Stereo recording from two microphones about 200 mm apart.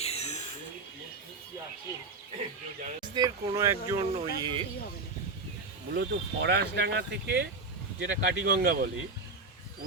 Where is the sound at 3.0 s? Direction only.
20° right (ahead or behind).